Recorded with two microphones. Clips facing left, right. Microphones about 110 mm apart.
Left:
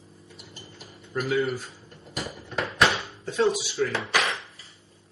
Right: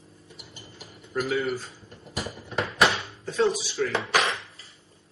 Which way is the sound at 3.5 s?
40° right (ahead or behind).